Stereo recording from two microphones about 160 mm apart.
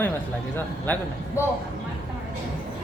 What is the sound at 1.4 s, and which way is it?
Speech, 20° left (ahead or behind).